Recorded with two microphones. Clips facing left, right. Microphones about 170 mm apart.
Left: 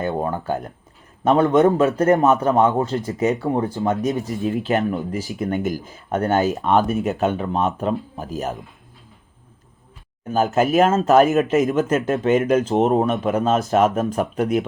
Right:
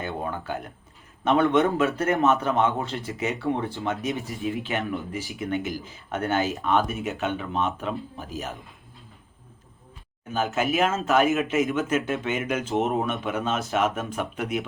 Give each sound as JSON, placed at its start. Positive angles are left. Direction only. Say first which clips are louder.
{"t": 0.0, "sound": "speech", "louder": "left 7 dB", "side_deg": 40}
{"t": 10.3, "sound": "speech", "louder": "left 7 dB", "side_deg": 40}